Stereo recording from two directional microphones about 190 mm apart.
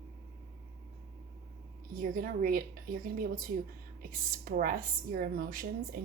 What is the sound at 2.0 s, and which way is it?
Speech, 50° right (ahead or behind).